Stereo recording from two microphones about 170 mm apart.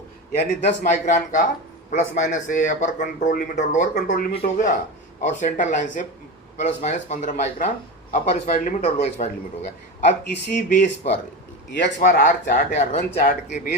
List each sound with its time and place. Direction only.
0.3 s speech: 45° left (ahead or behind)
3.9 s speech: 60° left (ahead or behind)
11.9 s speech: 50° left (ahead or behind)